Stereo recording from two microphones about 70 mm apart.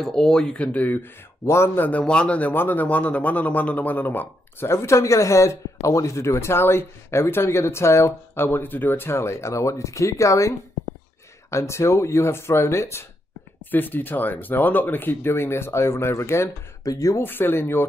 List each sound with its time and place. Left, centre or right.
0.0 s speech: centre; by 1.0 s left
1.4 s speech: left
1.8 s speech: left
4.6 s speech: left
11.5 s speech: left
13.7 s speech: left
16.8 s speech: left
17.2 s speech: left